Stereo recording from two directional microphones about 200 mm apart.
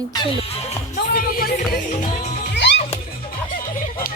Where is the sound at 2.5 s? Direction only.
60° left (ahead or behind).